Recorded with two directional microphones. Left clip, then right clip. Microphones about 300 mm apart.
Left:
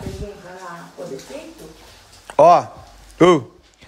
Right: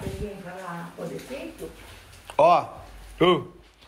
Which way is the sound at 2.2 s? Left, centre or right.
Left.